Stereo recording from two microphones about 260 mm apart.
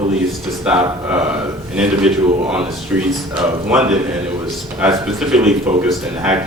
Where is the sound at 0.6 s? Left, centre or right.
Centre.